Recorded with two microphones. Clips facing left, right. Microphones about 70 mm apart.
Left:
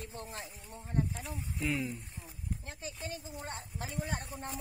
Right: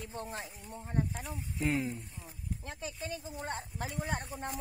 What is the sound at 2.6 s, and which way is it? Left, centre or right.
A woman's voice, right.